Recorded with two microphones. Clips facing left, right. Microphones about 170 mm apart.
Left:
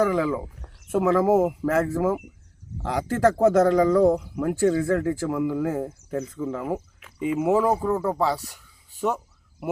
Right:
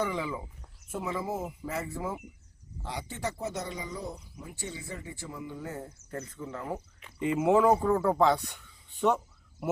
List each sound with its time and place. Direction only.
0.0 s speech: 90° left
6.7 s speech: 5° left (ahead or behind)